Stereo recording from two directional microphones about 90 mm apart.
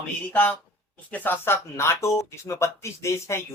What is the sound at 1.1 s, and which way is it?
Speech, 20° left (ahead or behind).